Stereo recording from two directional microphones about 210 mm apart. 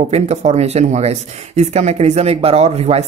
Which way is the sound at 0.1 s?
30° right (ahead or behind).